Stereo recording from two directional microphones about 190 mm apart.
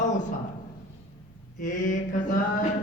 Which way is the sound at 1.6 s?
45° left (ahead or behind).